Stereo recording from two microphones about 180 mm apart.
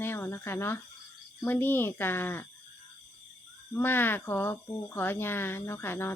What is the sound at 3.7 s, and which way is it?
Speech, 10° left (ahead or behind).